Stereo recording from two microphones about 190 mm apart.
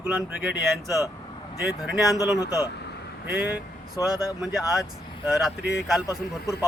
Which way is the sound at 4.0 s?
20° left (ahead or behind).